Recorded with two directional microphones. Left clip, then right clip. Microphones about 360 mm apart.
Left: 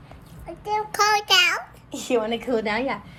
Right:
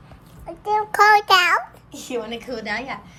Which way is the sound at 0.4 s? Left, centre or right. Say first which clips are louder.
Right 4 dB; centre.